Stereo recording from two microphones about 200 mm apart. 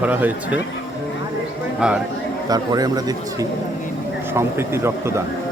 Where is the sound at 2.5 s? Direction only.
20° right (ahead or behind).